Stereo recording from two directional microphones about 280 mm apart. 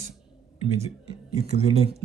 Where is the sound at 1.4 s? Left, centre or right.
Right.